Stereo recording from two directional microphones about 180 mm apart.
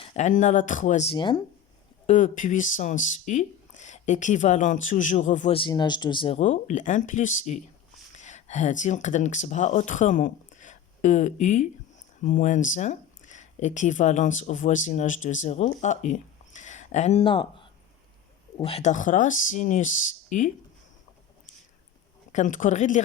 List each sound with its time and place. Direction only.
0.0 s speech: 35° left (ahead or behind)
1.1 s speech: 25° left (ahead or behind)
2.0 s speech: 45° left (ahead or behind)
5.5 s speech: 25° left (ahead or behind)
6.4 s speech: 45° left (ahead or behind); by 17.5 s 25° left (ahead or behind)
18.5 s speech: 30° left (ahead or behind)
22.3 s speech: 45° left (ahead or behind)